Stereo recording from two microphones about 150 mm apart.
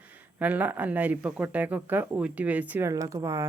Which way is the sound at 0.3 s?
10° right (ahead or behind).